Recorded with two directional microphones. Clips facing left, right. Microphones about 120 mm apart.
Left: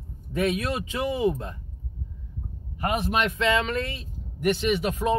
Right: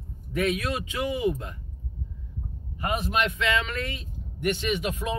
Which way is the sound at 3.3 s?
25° left (ahead or behind).